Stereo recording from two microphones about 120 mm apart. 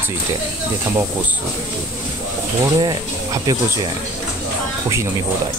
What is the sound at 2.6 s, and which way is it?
Speech, 30° right (ahead or behind).